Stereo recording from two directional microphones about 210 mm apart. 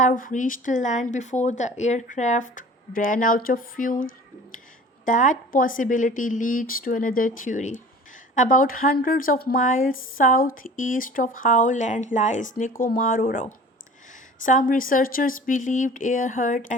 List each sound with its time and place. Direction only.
0.0 s speech: 40° left (ahead or behind)